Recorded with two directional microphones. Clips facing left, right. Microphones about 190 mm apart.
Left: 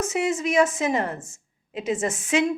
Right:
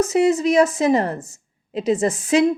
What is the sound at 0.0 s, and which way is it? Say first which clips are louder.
Speech: right 8 dB; 35° right (ahead or behind).